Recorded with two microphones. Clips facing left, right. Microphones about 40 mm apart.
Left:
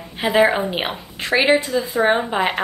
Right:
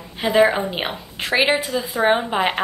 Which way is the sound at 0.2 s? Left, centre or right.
Centre.